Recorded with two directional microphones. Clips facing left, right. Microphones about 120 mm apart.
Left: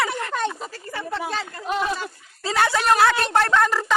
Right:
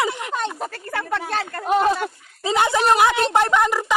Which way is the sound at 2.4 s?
20° right (ahead or behind).